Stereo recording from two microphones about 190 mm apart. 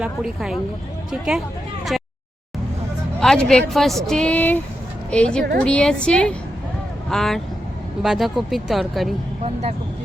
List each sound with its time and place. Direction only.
0.0 s a woman's voice: 5° right (ahead or behind)
1.9 s a sound: centre (ahead or behind)
3.2 s a woman's voice: 5° left (ahead or behind)
9.4 s speech: 35° right (ahead or behind)